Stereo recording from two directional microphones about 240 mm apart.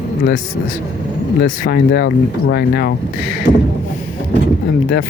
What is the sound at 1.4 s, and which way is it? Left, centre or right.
Speech, left.